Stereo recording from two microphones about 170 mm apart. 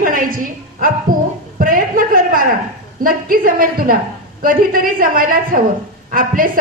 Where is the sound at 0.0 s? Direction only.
55° right (ahead or behind).